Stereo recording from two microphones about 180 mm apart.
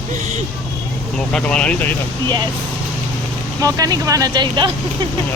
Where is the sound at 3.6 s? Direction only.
20° right (ahead or behind).